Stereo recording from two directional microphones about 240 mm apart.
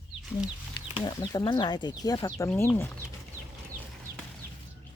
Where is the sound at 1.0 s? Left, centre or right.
Centre.